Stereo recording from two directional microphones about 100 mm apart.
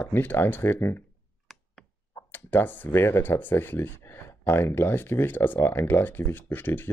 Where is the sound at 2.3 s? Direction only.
20° left (ahead or behind).